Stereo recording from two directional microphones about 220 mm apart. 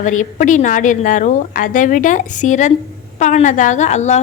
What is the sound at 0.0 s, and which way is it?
A woman's voice, 35° left (ahead or behind).